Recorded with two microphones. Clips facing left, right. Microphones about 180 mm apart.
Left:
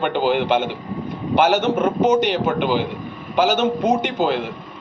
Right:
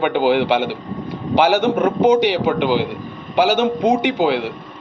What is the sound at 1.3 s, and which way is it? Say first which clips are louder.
Speech: right 2 dB; 10° right (ahead or behind).